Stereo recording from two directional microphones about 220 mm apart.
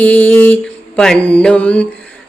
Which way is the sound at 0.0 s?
5° left (ahead or behind).